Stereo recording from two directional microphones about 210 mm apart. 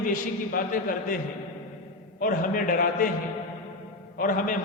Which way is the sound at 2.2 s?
40° left (ahead or behind).